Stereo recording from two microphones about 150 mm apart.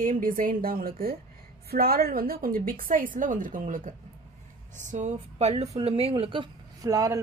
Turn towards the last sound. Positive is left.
turn(degrees=-20)  # may be behind; listen again after turning